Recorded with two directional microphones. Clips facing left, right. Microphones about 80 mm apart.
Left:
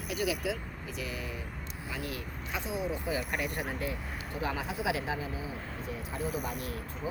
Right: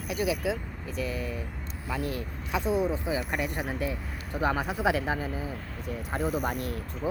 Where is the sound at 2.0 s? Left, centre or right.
Right.